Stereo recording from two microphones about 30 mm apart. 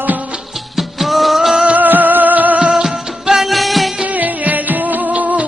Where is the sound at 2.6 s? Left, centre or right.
Right.